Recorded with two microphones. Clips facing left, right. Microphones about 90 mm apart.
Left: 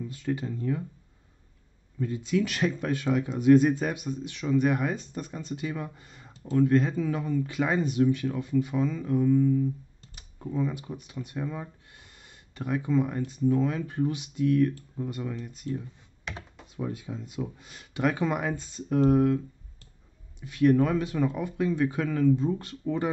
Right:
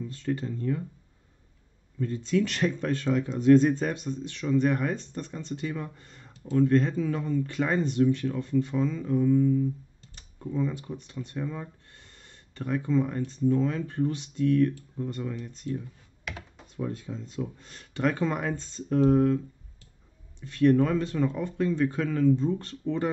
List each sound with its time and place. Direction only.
0.0 s speech: 10° left (ahead or behind)
2.0 s speech: 10° left (ahead or behind)